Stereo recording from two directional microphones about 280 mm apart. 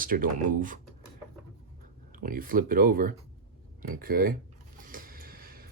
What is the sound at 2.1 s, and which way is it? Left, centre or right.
Speech, right.